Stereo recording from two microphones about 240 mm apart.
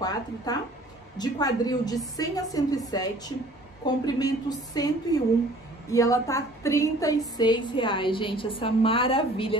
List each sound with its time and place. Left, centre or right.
0.0 s a woman's voice: centre